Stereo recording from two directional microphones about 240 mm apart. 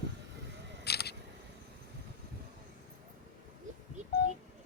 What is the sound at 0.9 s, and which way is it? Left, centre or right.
Camera, left.